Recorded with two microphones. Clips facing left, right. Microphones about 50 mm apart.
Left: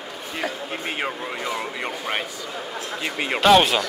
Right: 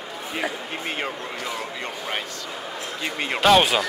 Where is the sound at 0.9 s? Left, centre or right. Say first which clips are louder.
Left 2 dB; centre.